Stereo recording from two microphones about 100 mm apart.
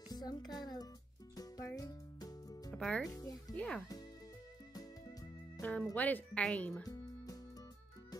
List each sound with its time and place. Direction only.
0.1 s a child's voice: 40° left (ahead or behind)
1.3 s music: 40° left (ahead or behind)
2.7 s speech: 5° left (ahead or behind)
3.1 s music: 40° left (ahead or behind)
3.5 s speech: 10° left (ahead or behind)
5.6 s speech: 10° left (ahead or behind)
6.8 s music: 35° left (ahead or behind)